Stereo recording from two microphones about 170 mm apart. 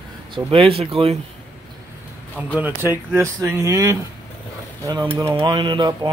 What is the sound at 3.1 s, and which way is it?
Speech, 15° right (ahead or behind).